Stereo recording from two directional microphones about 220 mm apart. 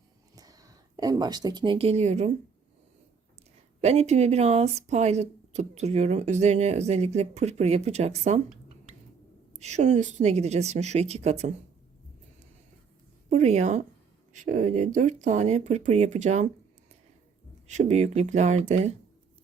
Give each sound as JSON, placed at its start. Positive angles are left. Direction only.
{"t": 0.3, "sound": "speech", "side_deg": -15}
{"t": 3.8, "sound": "speech", "side_deg": -30}
{"t": 9.6, "sound": "speech", "side_deg": -30}
{"t": 13.3, "sound": "speech", "side_deg": -30}
{"t": 17.7, "sound": "speech", "side_deg": -30}